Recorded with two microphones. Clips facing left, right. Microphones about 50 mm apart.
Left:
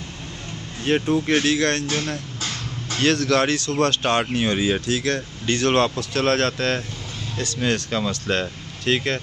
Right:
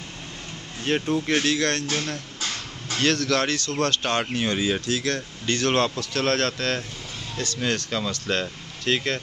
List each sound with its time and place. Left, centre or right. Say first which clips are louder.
0.8 s speech: left 4 dB; centre